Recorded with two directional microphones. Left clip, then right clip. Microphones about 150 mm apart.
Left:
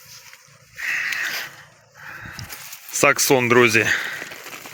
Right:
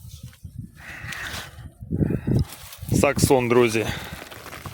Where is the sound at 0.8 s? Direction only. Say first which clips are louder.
Left 11 dB; 25° right (ahead or behind).